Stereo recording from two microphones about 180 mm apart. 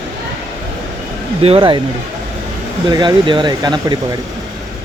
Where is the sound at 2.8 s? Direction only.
25° right (ahead or behind).